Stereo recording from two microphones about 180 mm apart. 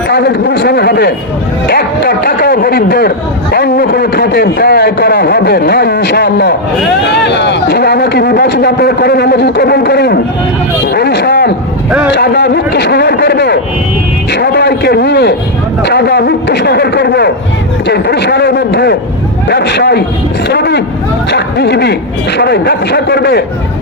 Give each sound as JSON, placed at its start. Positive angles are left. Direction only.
{"t": 0.1, "sound": "speech", "side_deg": 65}
{"t": 10.9, "sound": "a sound", "side_deg": 65}
{"t": 12.1, "sound": "a man's voice", "side_deg": 65}